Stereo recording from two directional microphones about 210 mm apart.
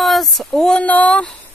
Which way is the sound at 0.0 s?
Centre (ahead or behind).